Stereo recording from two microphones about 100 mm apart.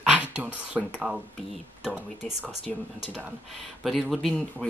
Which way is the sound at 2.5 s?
70° left (ahead or behind).